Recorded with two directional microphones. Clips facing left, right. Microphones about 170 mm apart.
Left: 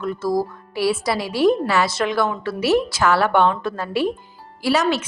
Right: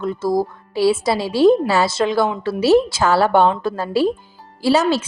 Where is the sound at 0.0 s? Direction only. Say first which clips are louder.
Right 2 dB; 25° right (ahead or behind).